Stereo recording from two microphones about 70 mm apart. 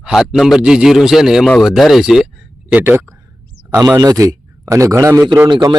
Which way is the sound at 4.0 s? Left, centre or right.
Right.